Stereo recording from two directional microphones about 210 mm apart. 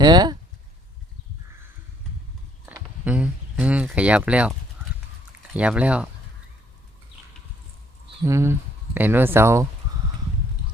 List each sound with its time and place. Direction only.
0.0 s speech: 20° right (ahead or behind)
2.6 s speech: 5° right (ahead or behind)
5.5 s speech: 5° right (ahead or behind)
8.2 s speech: 15° right (ahead or behind)